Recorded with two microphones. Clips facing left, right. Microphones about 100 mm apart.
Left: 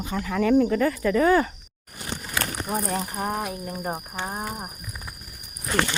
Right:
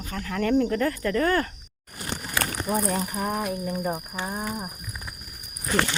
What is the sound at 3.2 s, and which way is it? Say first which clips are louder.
Speech: right 1 dB; 35° left (ahead or behind).